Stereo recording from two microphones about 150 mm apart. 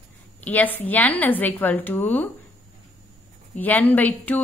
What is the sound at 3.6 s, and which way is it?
Speech, 10° left (ahead or behind).